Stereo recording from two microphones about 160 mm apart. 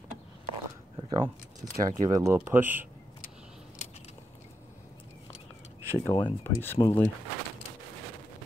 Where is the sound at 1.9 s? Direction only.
20° right (ahead or behind).